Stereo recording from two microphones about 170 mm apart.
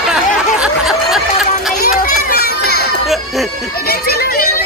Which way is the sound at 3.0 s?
Centre (ahead or behind).